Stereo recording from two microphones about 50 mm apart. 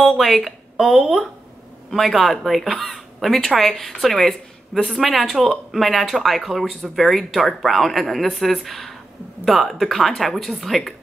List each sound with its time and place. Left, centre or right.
0.0 s speech: centre